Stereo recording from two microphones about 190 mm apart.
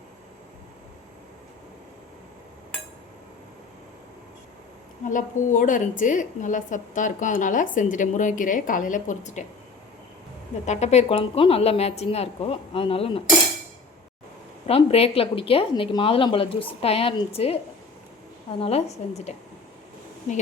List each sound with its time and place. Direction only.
5.0 s a woman's voice: 40° left (ahead or behind)
10.7 s a woman's voice: 35° left (ahead or behind)
14.7 s a woman's voice: 30° left (ahead or behind)
18.6 s a woman's voice: 30° left (ahead or behind)